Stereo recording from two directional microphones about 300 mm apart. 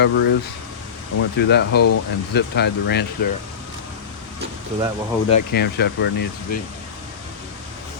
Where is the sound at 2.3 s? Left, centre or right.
Left.